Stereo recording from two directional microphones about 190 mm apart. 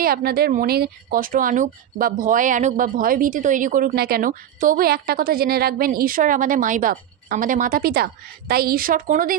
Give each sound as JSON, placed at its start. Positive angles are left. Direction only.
{"t": 0.0, "sound": "speech", "side_deg": -50}